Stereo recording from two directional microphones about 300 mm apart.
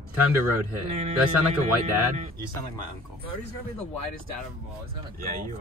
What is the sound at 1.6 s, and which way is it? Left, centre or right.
Speech, right.